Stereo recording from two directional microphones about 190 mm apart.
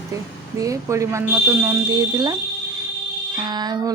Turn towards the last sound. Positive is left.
turn(degrees=-20)  # may be behind; listen again after turning